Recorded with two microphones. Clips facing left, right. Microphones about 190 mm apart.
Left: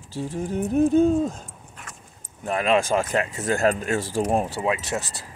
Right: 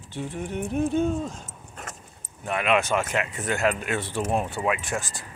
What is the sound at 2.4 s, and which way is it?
Speech, 35° left (ahead or behind).